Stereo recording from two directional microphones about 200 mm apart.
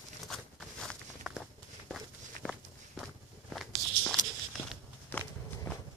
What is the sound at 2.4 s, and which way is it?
Walk, centre (ahead or behind).